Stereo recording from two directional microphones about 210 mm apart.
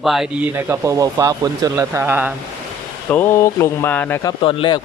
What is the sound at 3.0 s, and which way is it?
Speech, 10° left (ahead or behind).